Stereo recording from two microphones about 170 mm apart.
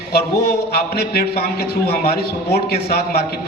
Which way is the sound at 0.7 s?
65° left (ahead or behind).